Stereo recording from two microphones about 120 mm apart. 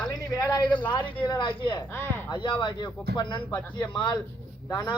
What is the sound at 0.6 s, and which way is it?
Speech, 40° left (ahead or behind).